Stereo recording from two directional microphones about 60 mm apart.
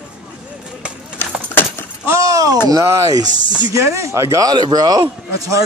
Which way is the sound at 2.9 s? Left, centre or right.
Right.